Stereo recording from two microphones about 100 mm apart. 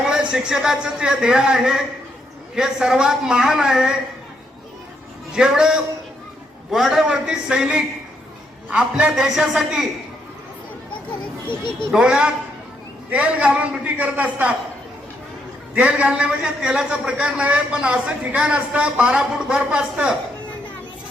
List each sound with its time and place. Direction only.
0.1 s a man's voice: 10° right (ahead or behind)
5.3 s a man's voice: 10° right (ahead or behind)
11.4 s speech: 50° left (ahead or behind)
11.9 s a man's voice: 10° right (ahead or behind)
15.7 s a man's voice: 15° right (ahead or behind)